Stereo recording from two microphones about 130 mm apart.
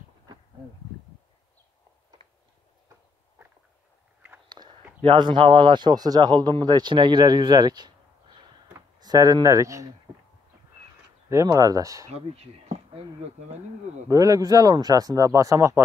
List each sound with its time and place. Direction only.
4.5 s a sound: 35° right (ahead or behind)
5.0 s speech: 40° right (ahead or behind)
9.0 s speech: 30° right (ahead or behind)
11.4 s speech: 30° right (ahead or behind)
12.1 s speech: 55° right (ahead or behind)
14.0 s speech: 25° right (ahead or behind)